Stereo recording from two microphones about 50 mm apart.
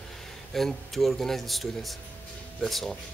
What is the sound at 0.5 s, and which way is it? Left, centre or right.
Speech, centre.